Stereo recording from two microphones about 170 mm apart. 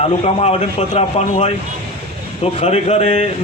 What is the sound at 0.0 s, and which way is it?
Speech, 40° left (ahead or behind).